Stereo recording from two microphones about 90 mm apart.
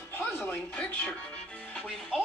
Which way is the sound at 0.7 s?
15° left (ahead or behind).